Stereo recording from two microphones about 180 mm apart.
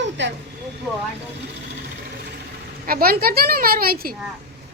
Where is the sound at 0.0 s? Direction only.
80° right.